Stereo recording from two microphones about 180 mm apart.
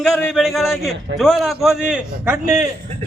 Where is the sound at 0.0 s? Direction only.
Centre (ahead or behind).